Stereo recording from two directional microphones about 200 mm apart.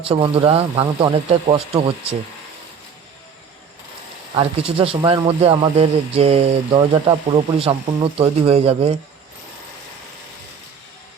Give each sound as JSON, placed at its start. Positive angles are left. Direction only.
{"t": 0.1, "sound": "speech", "side_deg": -25}
{"t": 4.4, "sound": "speech", "side_deg": -25}